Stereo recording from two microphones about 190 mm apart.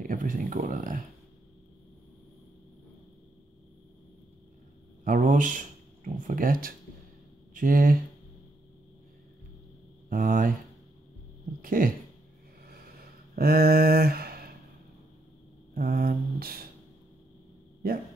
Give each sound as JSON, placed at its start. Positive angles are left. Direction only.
{"t": 0.0, "sound": "speech", "side_deg": -45}
{"t": 5.0, "sound": "speech", "side_deg": -45}
{"t": 10.0, "sound": "speech", "side_deg": -45}
{"t": 11.6, "sound": "speech", "side_deg": -45}
{"t": 13.4, "sound": "speech", "side_deg": -55}
{"t": 15.7, "sound": "speech", "side_deg": -50}